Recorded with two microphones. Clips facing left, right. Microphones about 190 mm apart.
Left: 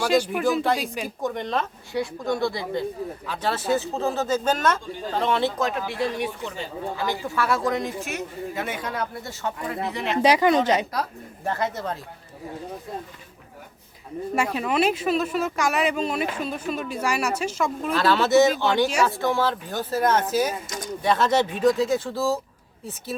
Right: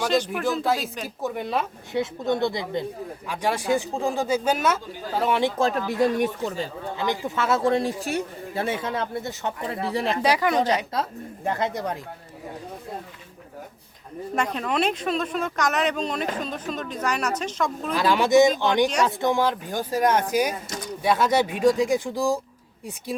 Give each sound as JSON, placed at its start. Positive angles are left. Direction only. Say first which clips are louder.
{"t": 0.0, "sound": "speech", "louder": "left 2 dB", "side_deg": 5}
{"t": 1.9, "sound": "speech", "louder": "right 2 dB", "side_deg": -20}
{"t": 5.5, "sound": "speech", "louder": "right 3 dB", "side_deg": -30}
{"t": 5.9, "sound": "speech", "louder": "right 5 dB", "side_deg": -45}
{"t": 6.9, "sound": "speech", "louder": "right 1 dB", "side_deg": -20}
{"t": 9.8, "sound": "speech", "louder": "right 3 dB", "side_deg": -35}
{"t": 10.2, "sound": "speech", "louder": "left 5 dB", "side_deg": 20}
{"t": 10.9, "sound": "speech", "louder": "right 1 dB", "side_deg": -25}
{"t": 14.3, "sound": "speech", "louder": "left 1 dB", "side_deg": 5}
{"t": 17.9, "sound": "speech", "louder": "right 1 dB", "side_deg": -15}